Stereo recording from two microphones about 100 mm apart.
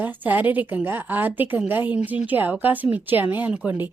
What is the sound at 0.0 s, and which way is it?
A woman's voice, 15° right (ahead or behind).